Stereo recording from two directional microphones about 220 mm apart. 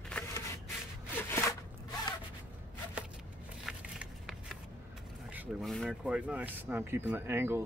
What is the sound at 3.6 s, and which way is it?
Shuffling cards, 5° right (ahead or behind).